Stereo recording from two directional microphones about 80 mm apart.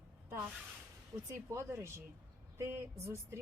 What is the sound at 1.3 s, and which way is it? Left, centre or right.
Speech, right.